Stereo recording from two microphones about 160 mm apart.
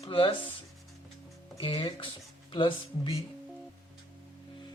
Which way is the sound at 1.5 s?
25° left (ahead or behind).